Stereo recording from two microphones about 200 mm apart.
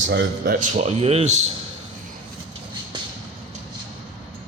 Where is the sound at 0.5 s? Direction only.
35° right (ahead or behind).